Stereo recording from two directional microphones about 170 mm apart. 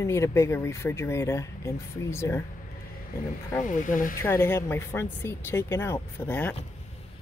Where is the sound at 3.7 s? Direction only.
50° left (ahead or behind).